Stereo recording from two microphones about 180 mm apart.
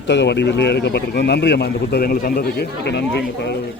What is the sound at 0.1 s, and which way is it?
A man's voice, 75° left (ahead or behind).